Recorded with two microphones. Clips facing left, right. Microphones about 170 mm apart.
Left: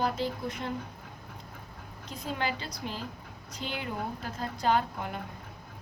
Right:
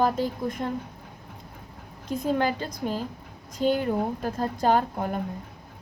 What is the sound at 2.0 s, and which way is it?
Speech, 50° right (ahead or behind).